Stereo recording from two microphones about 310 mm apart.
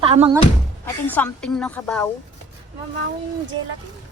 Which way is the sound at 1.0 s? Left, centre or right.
Centre.